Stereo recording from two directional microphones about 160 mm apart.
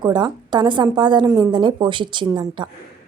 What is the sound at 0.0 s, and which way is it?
A woman's voice, 25° right (ahead or behind).